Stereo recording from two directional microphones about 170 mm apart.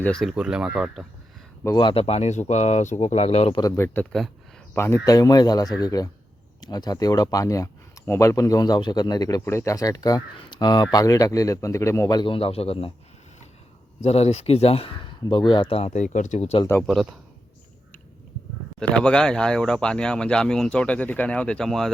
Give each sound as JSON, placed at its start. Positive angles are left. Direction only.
{"t": 0.0, "sound": "speech", "side_deg": 5}
{"t": 1.6, "sound": "speech", "side_deg": 25}
{"t": 3.6, "sound": "speech", "side_deg": 15}
{"t": 14.0, "sound": "speech", "side_deg": 40}
{"t": 16.8, "sound": "speech", "side_deg": 0}
{"t": 18.8, "sound": "speech", "side_deg": 5}